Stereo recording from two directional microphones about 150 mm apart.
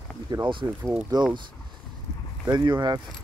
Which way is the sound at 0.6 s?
10° right (ahead or behind).